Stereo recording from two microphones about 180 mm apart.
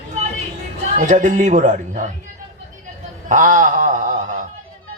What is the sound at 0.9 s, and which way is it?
Speech, 40° right (ahead or behind).